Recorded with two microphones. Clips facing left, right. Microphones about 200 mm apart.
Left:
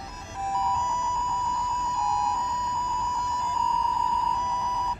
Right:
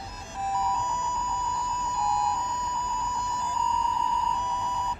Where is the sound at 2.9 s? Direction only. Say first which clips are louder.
Left 1 dB; 30° right (ahead or behind).